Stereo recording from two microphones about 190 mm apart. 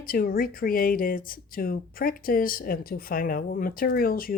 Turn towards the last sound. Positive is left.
turn(degrees=50)  # may be behind; listen again after turning